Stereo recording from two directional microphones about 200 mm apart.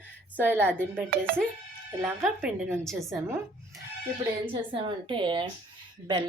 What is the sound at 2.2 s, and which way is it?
Speech, centre (ahead or behind).